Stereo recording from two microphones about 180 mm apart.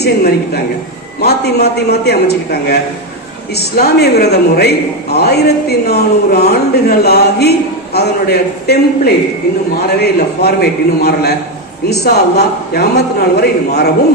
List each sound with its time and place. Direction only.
0.0 s speech: 65° left (ahead or behind)
9.8 s speech: 60° left (ahead or behind)